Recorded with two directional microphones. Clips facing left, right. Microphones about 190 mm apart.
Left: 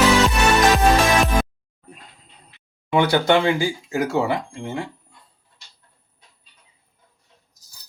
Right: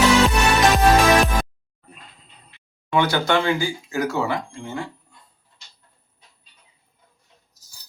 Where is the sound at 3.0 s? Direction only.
25° left (ahead or behind).